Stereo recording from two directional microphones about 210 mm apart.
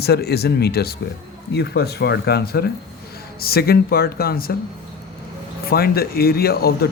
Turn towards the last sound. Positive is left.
turn(degrees=45)  # may be behind; listen again after turning